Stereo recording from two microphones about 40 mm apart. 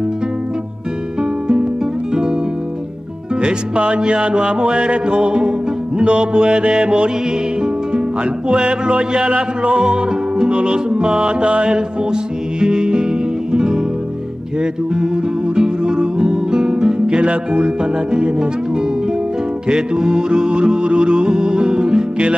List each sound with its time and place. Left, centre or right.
3.3 s music: right
15.5 s music: right
19.7 s music: centre